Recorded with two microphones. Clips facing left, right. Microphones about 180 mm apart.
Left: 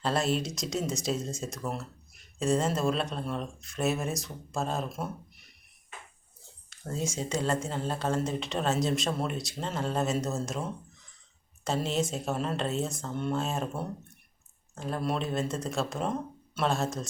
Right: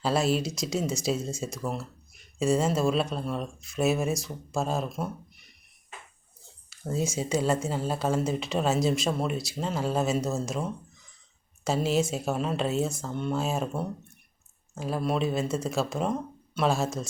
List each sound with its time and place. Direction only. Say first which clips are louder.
0.0 s speech: right 3 dB; 5° right (ahead or behind)
6.7 s speech: right 4 dB; 5° right (ahead or behind)
11.6 s speech: right 4 dB; 5° right (ahead or behind)